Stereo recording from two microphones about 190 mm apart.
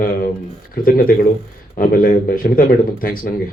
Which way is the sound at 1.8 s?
50° left (ahead or behind).